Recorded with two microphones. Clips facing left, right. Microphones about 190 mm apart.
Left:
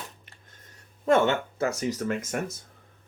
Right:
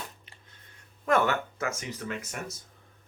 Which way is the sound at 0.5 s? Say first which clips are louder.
Left 3 dB; 45° left (ahead or behind).